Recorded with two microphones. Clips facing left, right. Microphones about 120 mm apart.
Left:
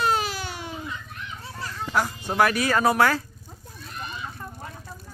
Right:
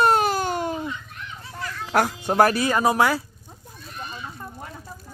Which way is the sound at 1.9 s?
65° right (ahead or behind).